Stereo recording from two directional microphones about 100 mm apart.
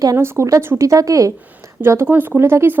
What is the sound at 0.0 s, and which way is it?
A woman's voice, 30° right (ahead or behind).